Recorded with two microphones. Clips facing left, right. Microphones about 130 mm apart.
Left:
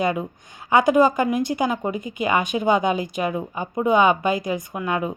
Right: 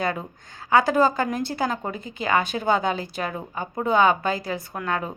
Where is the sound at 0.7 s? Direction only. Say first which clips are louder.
Left 3 dB; 20° left (ahead or behind).